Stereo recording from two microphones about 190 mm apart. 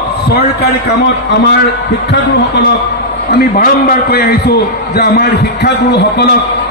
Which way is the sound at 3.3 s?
50° left (ahead or behind).